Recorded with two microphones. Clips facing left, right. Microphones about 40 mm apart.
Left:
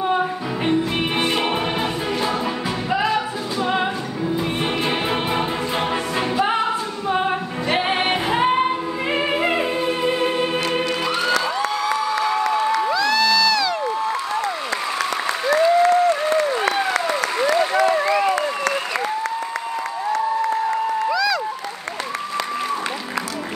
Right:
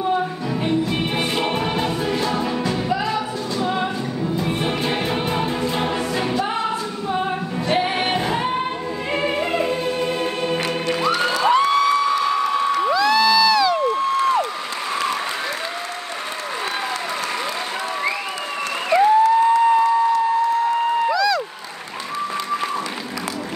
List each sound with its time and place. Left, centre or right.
0.7 s music: left
1.2 s music: centre
3.6 s music: left
7.1 s music: left
8.4 s music: left
12.9 s crowd: centre
21.1 s a sound: centre